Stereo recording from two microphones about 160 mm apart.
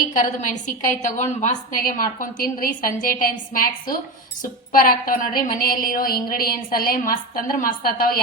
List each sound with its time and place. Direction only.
0.1 s a woman's voice: 55° left (ahead or behind); by 8.2 s 70° left (ahead or behind)